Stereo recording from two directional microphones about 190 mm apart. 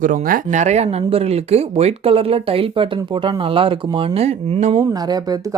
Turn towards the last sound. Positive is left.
turn(degrees=-20)  # may be behind; listen again after turning